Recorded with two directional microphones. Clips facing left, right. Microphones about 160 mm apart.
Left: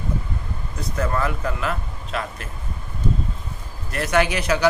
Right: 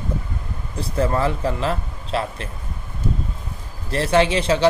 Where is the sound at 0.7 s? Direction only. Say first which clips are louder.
Right 4 dB; 30° right (ahead or behind).